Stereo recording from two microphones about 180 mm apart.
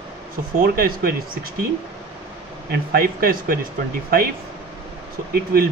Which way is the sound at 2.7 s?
60° right (ahead or behind).